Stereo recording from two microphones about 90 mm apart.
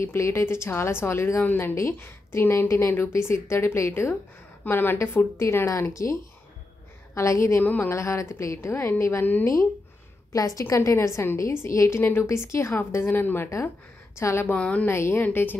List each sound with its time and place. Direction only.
0.0 s a woman's voice: 30° left (ahead or behind)
7.2 s a woman's voice: 35° left (ahead or behind)
7.5 s a woman's voice: 20° left (ahead or behind)
7.9 s a woman's voice: 35° left (ahead or behind)
10.3 s a woman's voice: 40° left (ahead or behind)
14.5 s a woman's voice: 15° left (ahead or behind)
14.9 s a woman's voice: 30° left (ahead or behind)